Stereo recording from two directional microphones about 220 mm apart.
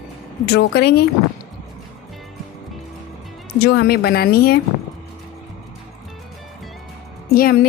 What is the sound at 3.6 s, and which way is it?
Speech, 45° left (ahead or behind).